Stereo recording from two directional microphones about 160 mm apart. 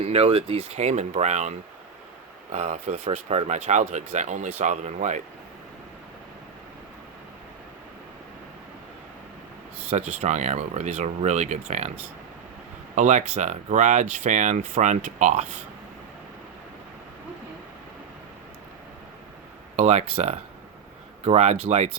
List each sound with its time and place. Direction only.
0.0 s speech: 40° right (ahead or behind)
10.2 s speech: 45° right (ahead or behind)
13.0 s speech: 50° right (ahead or behind)
19.7 s speech: 45° right (ahead or behind)